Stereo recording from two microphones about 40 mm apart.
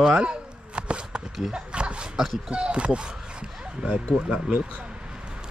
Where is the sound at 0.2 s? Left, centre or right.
Right.